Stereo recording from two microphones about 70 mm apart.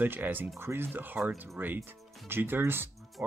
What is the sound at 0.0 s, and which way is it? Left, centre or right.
Speech, right.